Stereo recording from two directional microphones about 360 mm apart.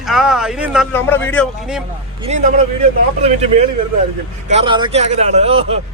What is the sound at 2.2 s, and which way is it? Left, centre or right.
A man's voice, centre.